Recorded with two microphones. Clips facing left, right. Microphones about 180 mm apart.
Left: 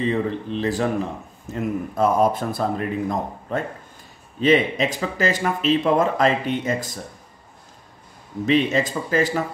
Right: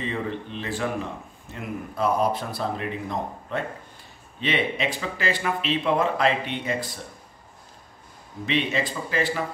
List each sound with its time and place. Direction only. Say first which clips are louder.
0.0 s speech: left 7 dB; 35° left (ahead or behind)
8.5 s speech: left 6 dB; 40° left (ahead or behind)